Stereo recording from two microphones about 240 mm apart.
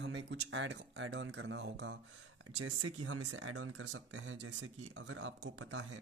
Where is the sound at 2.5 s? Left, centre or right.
Right.